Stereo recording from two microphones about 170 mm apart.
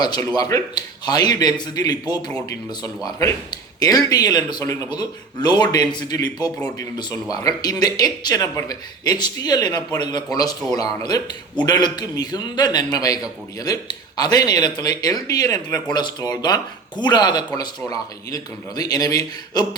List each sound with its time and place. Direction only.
0.0 s a man's voice: 25° left (ahead or behind)